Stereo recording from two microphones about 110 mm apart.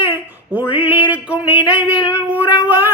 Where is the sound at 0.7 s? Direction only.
15° right (ahead or behind).